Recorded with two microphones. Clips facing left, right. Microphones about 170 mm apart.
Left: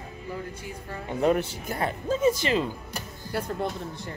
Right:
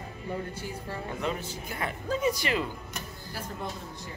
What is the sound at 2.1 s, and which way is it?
Speech, 25° left (ahead or behind).